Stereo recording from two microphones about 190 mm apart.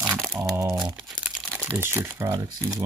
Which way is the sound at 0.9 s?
5° right (ahead or behind).